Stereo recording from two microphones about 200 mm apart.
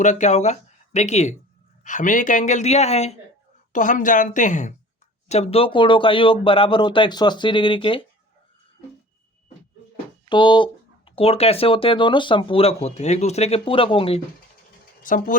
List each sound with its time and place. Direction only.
0.0 s a man's voice: 35° left (ahead or behind)
10.2 s speech: 25° left (ahead or behind)
15.0 s a man's voice: 40° left (ahead or behind)